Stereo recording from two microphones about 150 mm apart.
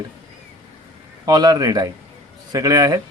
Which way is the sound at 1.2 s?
25° right (ahead or behind).